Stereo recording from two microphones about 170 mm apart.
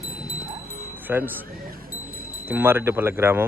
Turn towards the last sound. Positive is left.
turn(degrees=-15)  # may be behind; listen again after turning